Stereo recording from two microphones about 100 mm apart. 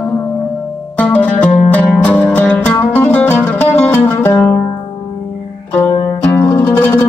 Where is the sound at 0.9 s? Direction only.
15° left (ahead or behind).